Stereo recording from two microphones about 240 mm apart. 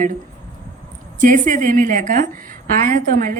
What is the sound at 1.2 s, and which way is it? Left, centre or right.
A woman's voice, right.